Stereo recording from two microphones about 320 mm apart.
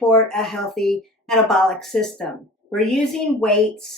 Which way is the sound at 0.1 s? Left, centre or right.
Centre.